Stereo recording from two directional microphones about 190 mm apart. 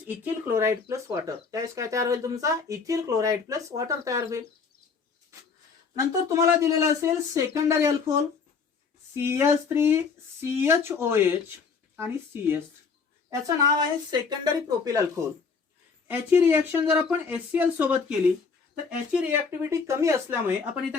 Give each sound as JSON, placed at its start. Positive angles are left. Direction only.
{"t": 0.0, "sound": "speech", "side_deg": -10}
{"t": 5.9, "sound": "a woman's voice", "side_deg": -15}
{"t": 18.9, "sound": "speech", "side_deg": -5}